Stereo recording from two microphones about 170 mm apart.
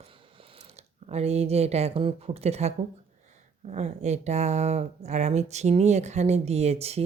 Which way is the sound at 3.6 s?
40° right (ahead or behind).